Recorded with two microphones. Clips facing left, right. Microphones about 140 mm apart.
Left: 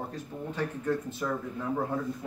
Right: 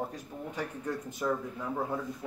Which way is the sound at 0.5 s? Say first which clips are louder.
Left 6 dB; 15° right (ahead or behind).